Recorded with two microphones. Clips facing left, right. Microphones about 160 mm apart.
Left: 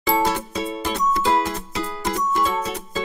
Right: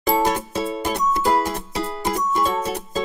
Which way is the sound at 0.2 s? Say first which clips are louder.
Right 1 dB; 15° right (ahead or behind).